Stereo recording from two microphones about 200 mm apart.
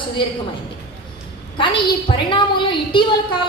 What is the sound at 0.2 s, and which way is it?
Speech, 25° left (ahead or behind).